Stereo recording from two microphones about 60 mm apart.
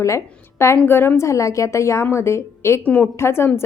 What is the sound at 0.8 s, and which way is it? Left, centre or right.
A woman's voice, left.